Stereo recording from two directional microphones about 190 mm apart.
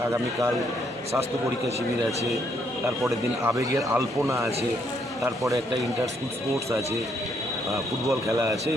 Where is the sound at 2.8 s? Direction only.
15° right (ahead or behind).